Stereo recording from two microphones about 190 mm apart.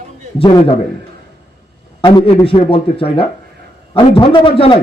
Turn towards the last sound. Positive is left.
turn(degrees=30)  # may be behind; listen again after turning